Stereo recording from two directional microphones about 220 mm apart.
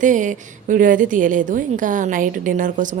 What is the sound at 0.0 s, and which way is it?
A woman's voice, 35° right (ahead or behind).